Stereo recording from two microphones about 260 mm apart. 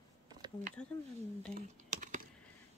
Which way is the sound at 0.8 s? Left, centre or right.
Centre.